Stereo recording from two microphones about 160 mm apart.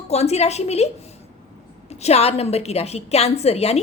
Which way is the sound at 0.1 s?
40° left (ahead or behind).